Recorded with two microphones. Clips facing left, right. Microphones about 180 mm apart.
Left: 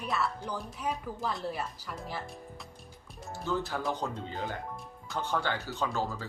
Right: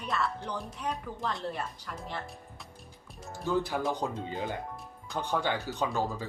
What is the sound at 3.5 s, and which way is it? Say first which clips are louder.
Speech: right 3 dB; 15° right (ahead or behind).